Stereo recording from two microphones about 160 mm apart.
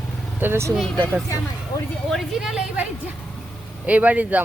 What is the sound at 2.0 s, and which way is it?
A woman's voice, centre (ahead or behind).